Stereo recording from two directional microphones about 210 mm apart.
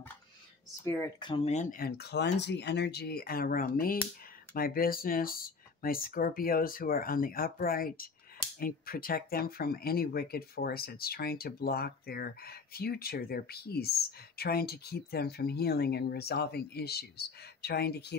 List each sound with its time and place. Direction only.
0.8 s speech: 15° left (ahead or behind); by 18.1 s 50° left (ahead or behind)